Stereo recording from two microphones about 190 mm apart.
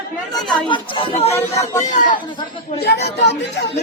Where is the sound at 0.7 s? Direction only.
30° left (ahead or behind).